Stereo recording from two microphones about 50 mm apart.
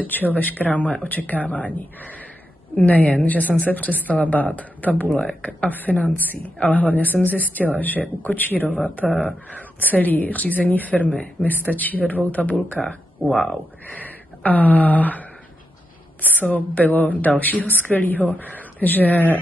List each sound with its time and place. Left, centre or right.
0.0 s a woman's voice: left
12.8 s speech: centre
13.9 s a sound: left
16.3 s a woman's voice: left